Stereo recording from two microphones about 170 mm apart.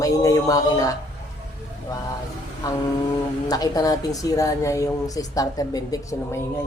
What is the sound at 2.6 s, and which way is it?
A woman's voice, 20° left (ahead or behind).